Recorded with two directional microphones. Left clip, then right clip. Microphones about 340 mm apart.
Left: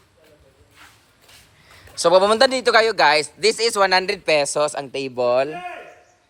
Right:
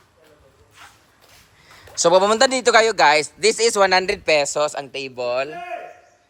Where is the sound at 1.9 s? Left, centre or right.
Centre.